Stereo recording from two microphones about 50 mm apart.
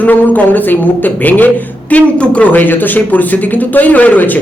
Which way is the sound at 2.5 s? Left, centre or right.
Left.